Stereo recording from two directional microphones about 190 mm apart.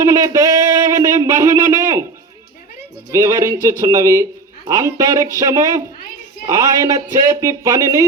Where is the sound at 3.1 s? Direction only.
15° right (ahead or behind).